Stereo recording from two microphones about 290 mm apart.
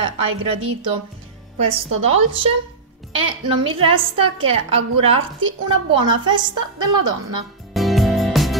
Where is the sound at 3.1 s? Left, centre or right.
Centre.